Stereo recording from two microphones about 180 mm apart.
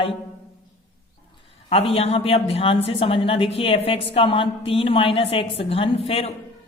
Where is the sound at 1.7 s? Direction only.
35° left (ahead or behind).